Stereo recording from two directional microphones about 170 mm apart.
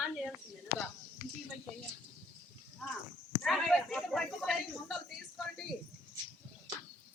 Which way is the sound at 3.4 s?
Centre (ahead or behind).